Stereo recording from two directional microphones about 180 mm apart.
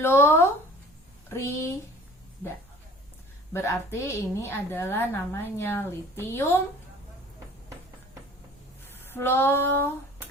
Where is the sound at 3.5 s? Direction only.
15° left (ahead or behind).